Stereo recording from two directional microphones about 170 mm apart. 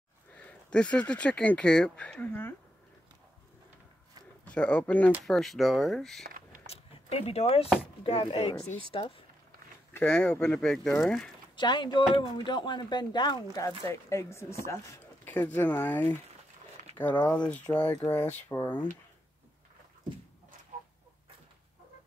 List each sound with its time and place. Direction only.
0.3 s speech: 10° left (ahead or behind)
4.5 s speech: 5° left (ahead or behind)
6.2 s a sound: 55° right (ahead or behind)
6.7 s speech: 35° left (ahead or behind)
9.9 s speech: 5° left (ahead or behind)
11.5 s speech: 25° left (ahead or behind); by 16.2 s 10° left (ahead or behind)
17.3 s speech: 5° left (ahead or behind)